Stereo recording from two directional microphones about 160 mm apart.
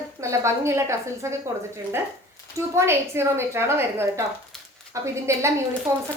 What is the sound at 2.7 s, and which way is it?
A woman's voice, 15° right (ahead or behind).